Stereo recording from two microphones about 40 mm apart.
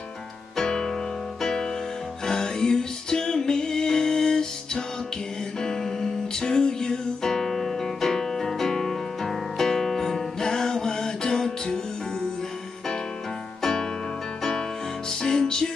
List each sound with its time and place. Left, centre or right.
0.6 s music: centre
13.6 s music: centre
15.0 s music: centre